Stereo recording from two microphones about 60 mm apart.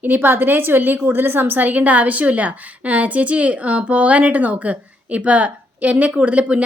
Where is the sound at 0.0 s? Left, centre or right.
Right.